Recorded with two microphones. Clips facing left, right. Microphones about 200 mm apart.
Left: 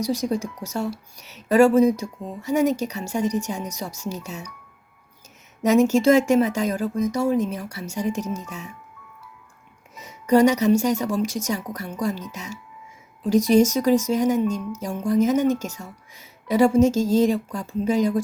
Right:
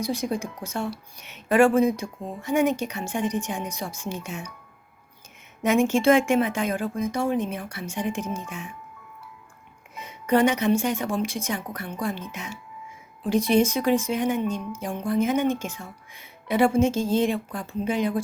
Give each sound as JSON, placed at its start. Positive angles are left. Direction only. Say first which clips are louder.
{"t": 0.0, "sound": "speech", "louder": "left 3 dB", "side_deg": 40}
{"t": 5.6, "sound": "speech", "louder": "left 3 dB", "side_deg": 40}
{"t": 9.9, "sound": "a woman's voice", "louder": "left 4 dB", "side_deg": 40}